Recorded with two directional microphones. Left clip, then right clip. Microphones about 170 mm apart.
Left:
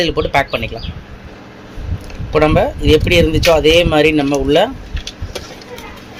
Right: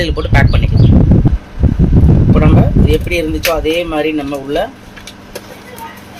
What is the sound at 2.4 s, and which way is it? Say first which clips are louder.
Speech: left 1 dB; 50° left (ahead or behind).